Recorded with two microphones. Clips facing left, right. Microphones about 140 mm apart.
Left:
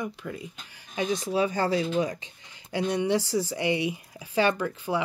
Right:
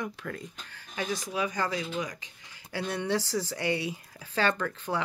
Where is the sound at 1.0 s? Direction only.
25° left (ahead or behind).